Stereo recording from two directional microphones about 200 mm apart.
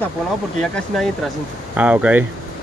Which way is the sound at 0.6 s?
Centre (ahead or behind).